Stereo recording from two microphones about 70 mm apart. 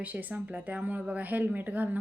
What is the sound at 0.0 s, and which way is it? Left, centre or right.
A woman's voice, right.